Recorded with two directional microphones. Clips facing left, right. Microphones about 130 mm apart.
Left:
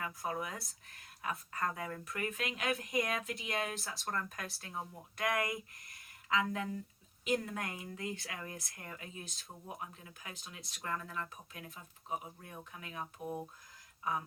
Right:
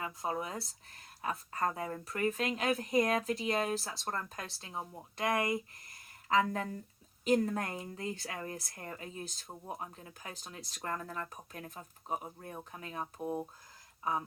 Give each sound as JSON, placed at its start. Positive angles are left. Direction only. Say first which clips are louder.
{"t": 0.0, "sound": "speech", "louder": "right 2 dB", "side_deg": -25}